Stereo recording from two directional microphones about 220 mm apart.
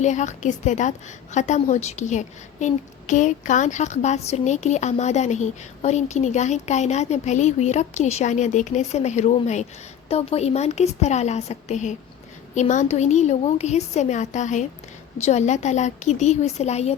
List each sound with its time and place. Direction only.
0.0 s a woman's voice: 30° left (ahead or behind)